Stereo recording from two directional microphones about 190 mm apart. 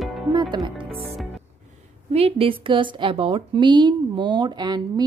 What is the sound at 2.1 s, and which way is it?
A woman's voice, 30° right (ahead or behind).